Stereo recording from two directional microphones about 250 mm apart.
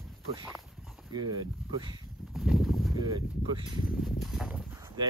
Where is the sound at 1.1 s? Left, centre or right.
Centre.